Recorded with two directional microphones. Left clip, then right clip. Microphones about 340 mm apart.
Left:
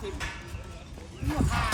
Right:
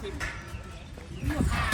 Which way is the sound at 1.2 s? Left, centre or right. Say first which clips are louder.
Left 1 dB; centre.